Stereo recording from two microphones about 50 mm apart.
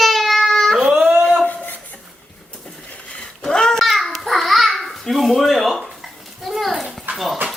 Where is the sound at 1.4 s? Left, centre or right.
Left.